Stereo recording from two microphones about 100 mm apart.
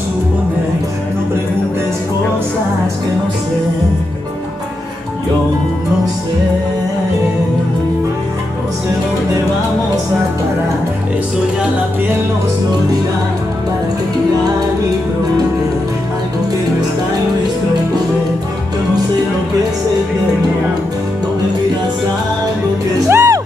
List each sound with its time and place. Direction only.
22.9 s music: 30° right (ahead or behind)